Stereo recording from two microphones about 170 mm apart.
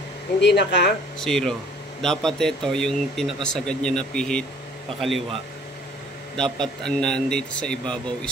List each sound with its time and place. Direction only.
0.4 s speech: 90° left
1.2 s a man's voice: 5° left (ahead or behind)
6.3 s a man's voice: 5° left (ahead or behind)